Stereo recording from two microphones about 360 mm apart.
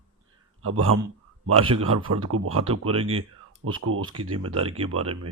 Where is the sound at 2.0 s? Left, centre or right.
Right.